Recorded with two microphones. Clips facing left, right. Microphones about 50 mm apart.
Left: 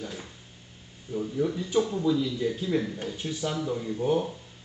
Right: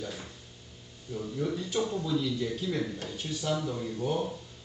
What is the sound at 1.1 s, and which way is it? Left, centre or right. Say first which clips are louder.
Speech: left 4 dB; centre.